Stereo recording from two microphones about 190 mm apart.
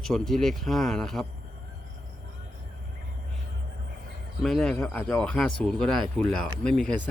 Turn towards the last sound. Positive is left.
turn(degrees=5)  # may be behind; listen again after turning